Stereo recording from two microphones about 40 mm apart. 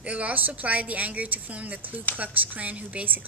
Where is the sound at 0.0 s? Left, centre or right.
Right.